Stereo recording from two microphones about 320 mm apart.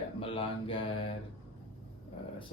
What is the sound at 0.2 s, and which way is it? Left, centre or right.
Mantra, centre.